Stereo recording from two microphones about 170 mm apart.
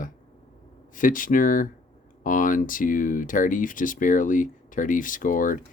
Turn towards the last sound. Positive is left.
turn(degrees=50)  # may be behind; listen again after turning